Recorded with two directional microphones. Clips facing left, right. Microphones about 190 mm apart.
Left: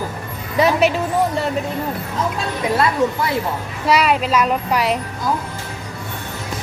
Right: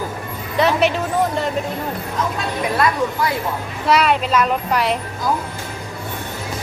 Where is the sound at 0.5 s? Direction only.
10° left (ahead or behind).